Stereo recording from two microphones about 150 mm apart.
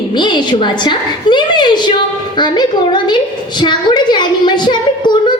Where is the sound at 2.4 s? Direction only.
30° left (ahead or behind).